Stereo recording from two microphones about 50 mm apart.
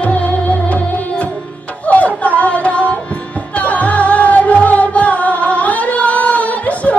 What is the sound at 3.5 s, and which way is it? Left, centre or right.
Music, left.